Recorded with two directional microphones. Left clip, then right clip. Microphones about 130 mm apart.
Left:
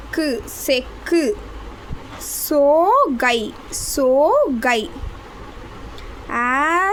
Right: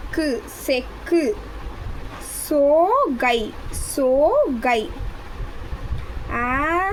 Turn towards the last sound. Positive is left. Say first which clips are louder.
# left 4 dB
turn(degrees=40)  # may be behind; listen again after turning